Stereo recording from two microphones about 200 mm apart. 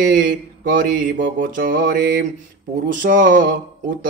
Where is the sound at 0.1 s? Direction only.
40° right (ahead or behind).